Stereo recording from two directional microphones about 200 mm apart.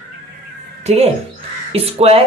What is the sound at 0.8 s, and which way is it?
Speech, 30° right (ahead or behind).